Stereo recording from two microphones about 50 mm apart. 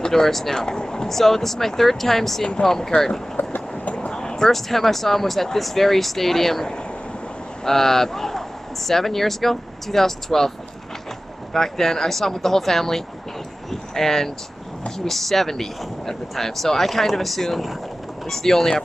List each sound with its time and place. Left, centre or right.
0.0 s speech: centre
3.4 s train: left
3.7 s a sound: left
4.1 s speech: centre
11.5 s speech: centre